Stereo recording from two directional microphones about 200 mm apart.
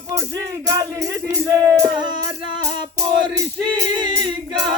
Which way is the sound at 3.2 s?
20° right (ahead or behind).